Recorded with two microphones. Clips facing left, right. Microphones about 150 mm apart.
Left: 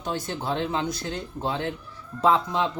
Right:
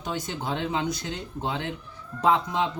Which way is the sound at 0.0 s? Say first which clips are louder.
Left 2 dB; 15° right (ahead or behind).